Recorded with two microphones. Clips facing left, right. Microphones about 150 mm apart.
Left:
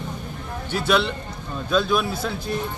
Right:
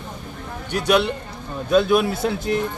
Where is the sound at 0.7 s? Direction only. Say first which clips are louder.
Right 2 dB; 15° right (ahead or behind).